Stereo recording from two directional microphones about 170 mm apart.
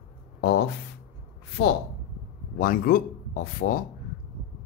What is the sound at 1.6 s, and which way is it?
Speech, 75° left (ahead or behind).